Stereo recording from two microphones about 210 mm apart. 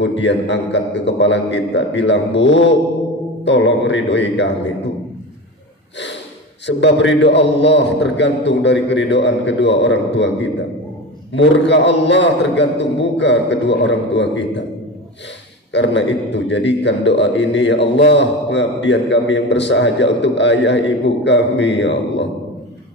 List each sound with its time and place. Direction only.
0.0 s a man's voice: 55° left (ahead or behind)
6.6 s a man's voice: 60° left (ahead or behind)
15.7 s a man's voice: 55° left (ahead or behind)